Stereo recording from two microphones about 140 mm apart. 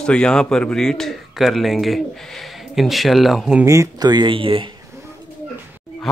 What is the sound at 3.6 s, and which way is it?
Speech, 25° right (ahead or behind).